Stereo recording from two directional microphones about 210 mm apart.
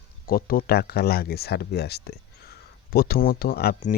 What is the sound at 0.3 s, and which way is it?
Speech, 45° left (ahead or behind).